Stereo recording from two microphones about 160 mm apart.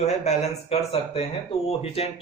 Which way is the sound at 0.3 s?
40° left (ahead or behind).